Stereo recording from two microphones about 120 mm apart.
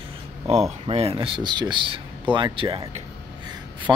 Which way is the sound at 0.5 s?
65° right (ahead or behind).